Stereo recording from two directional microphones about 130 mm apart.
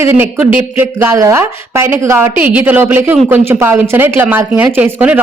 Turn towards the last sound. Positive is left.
turn(degrees=-15)  # may be behind; listen again after turning